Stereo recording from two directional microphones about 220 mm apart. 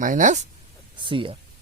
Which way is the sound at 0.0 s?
35° right (ahead or behind).